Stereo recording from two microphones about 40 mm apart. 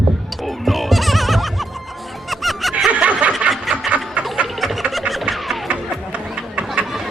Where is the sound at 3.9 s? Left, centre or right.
Right.